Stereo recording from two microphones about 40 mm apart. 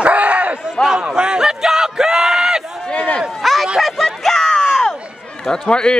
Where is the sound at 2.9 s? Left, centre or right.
Left.